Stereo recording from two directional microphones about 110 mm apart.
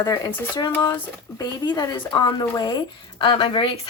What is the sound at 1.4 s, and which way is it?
Speech, 35° left (ahead or behind).